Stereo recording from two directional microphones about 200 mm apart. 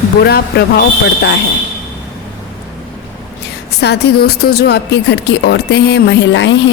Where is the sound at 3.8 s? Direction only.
55° left (ahead or behind).